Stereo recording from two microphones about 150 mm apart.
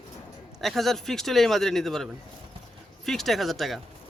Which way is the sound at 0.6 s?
Centre (ahead or behind).